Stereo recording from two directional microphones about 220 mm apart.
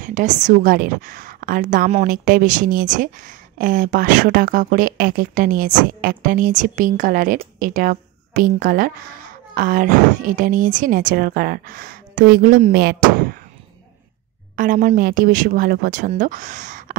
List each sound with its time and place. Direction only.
0.0 s a woman's voice: 35° right (ahead or behind)
14.5 s a woman's voice: 40° right (ahead or behind)